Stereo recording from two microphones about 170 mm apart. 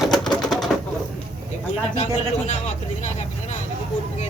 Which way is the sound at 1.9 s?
45° left (ahead or behind).